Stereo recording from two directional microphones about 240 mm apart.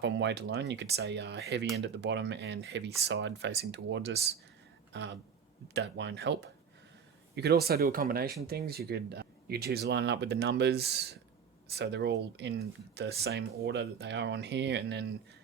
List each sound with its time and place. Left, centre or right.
0.0 s speech: right